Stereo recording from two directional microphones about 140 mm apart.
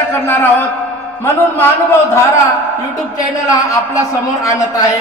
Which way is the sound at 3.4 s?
25° left (ahead or behind).